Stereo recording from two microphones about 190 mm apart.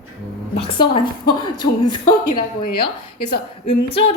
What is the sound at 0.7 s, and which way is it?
A woman's voice, 25° left (ahead or behind).